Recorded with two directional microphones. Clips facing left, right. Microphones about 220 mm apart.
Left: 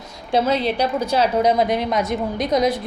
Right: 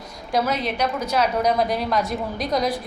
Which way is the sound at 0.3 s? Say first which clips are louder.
Left 4 dB; 25° left (ahead or behind).